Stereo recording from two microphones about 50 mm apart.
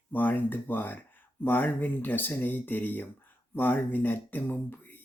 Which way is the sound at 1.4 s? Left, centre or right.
Left.